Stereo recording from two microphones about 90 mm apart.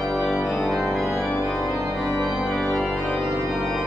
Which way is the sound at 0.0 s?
Centre (ahead or behind).